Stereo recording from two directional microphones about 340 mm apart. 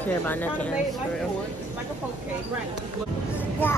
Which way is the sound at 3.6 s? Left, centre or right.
Centre.